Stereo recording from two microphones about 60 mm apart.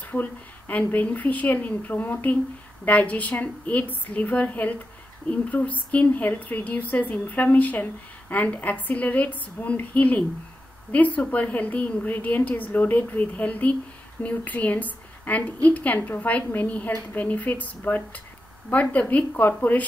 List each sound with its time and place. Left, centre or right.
0.1 s speech: left